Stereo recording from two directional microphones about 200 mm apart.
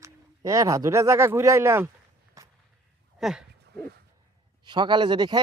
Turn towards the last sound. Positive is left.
turn(degrees=-20)  # may be behind; listen again after turning